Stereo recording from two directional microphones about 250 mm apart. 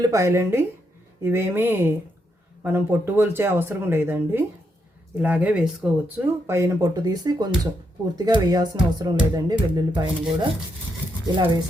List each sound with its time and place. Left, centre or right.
0.0 s speech: centre